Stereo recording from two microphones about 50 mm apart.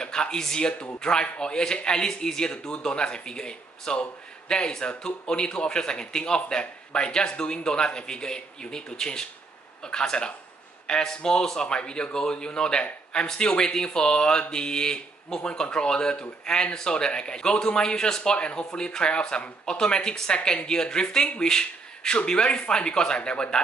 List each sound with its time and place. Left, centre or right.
0.0 s speech: centre